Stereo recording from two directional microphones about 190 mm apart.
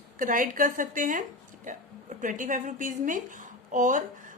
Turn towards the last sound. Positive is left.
turn(degrees=-40)  # may be behind; listen again after turning